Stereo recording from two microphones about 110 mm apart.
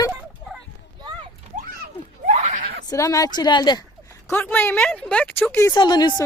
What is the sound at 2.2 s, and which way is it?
Screaming, 90° right.